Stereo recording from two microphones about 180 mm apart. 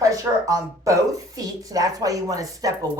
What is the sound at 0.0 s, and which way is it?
Speech, 20° right (ahead or behind).